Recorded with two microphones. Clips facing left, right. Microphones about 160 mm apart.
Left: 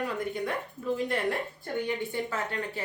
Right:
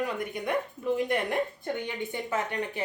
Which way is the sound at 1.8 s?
20° right (ahead or behind).